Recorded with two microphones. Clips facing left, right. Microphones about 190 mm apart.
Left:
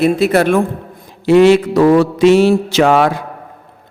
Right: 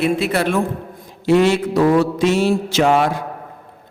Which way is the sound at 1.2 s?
90° left.